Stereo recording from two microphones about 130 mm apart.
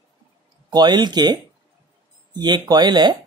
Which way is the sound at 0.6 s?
35° right (ahead or behind).